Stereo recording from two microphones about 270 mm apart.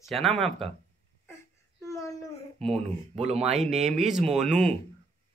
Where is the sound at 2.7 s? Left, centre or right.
Right.